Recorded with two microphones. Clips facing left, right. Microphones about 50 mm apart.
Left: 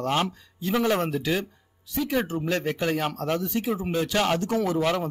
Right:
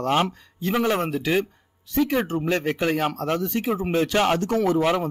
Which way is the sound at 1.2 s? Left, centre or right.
Right.